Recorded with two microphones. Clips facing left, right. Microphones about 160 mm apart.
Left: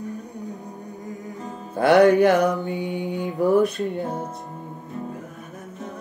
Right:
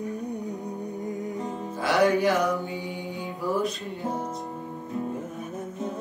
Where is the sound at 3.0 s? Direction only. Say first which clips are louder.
Left 9 dB; 70° left (ahead or behind).